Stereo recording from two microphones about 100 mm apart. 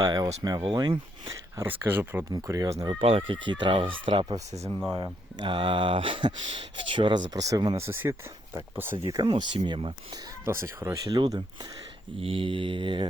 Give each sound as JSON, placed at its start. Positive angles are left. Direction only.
{"t": 0.0, "sound": "speech", "side_deg": -40}
{"t": 0.6, "sound": "speech", "side_deg": -55}
{"t": 1.8, "sound": "speech", "side_deg": -20}
{"t": 2.3, "sound": "speech", "side_deg": -35}
{"t": 3.0, "sound": "speech", "side_deg": -70}
{"t": 3.5, "sound": "speech", "side_deg": -55}
{"t": 5.4, "sound": "speech", "side_deg": -60}
{"t": 7.8, "sound": "speech", "side_deg": -25}
{"t": 9.0, "sound": "speech", "side_deg": -40}
{"t": 9.3, "sound": "speech", "side_deg": -50}
{"t": 10.4, "sound": "speech", "side_deg": -25}
{"t": 12.2, "sound": "speech", "side_deg": -65}